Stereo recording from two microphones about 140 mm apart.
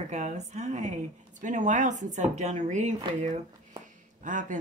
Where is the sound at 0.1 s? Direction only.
55° right (ahead or behind).